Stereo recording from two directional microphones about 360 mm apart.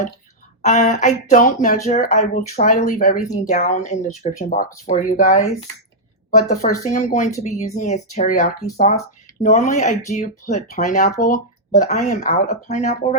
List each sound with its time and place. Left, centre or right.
0.6 s speech: centre
6.5 s speech: left